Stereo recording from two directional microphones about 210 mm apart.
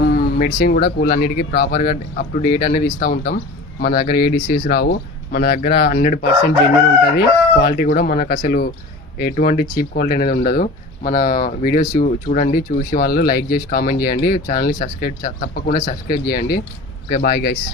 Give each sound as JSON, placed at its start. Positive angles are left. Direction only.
{"t": 0.0, "sound": "speech", "side_deg": 45}
{"t": 7.2, "sound": "speech", "side_deg": 45}